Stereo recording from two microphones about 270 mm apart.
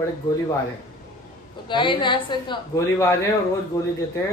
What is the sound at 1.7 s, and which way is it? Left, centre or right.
A woman's voice, centre.